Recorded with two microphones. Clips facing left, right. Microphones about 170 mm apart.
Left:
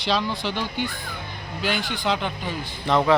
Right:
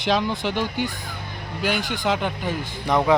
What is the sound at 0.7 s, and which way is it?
Speech, 45° right (ahead or behind).